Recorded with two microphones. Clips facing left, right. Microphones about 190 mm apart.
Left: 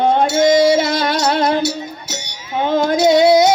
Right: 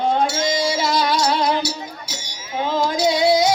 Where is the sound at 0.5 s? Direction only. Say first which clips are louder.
Left 10 dB; 25° left (ahead or behind).